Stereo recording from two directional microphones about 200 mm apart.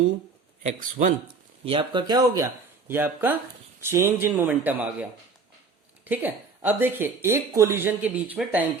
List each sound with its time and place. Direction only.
0.7 s speech: 40° right (ahead or behind)
1.6 s a woman's voice: 25° right (ahead or behind); by 5.0 s 10° right (ahead or behind)
6.1 s a woman's voice: 10° right (ahead or behind)